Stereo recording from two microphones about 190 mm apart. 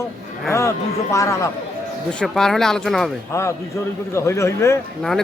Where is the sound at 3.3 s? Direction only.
15° left (ahead or behind).